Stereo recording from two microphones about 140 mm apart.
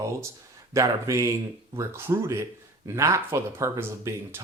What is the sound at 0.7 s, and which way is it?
Speech, 20° right (ahead or behind).